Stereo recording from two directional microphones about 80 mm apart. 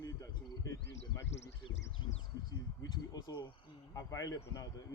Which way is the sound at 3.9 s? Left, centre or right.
Left.